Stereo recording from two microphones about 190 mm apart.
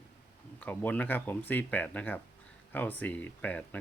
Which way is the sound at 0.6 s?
10° left (ahead or behind).